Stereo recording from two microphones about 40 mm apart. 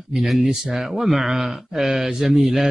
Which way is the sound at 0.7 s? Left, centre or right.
Centre.